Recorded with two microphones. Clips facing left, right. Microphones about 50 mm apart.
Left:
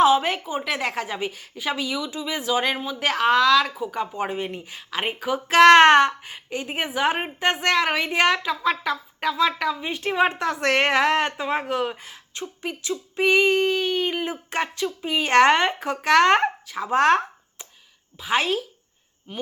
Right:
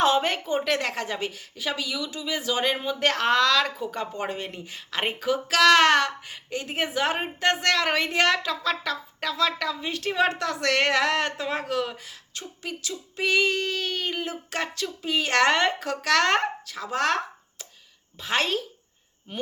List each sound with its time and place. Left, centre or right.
0.0 s a woman's voice: centre
5.5 s a woman's voice: left
18.2 s a woman's voice: centre